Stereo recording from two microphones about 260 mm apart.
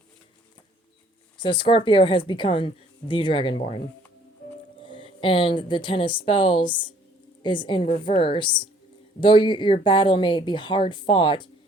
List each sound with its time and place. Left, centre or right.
1.4 s speech: centre
4.8 s a woman's voice: centre